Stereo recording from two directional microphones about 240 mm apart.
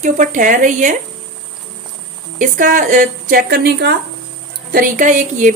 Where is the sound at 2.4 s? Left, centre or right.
Right.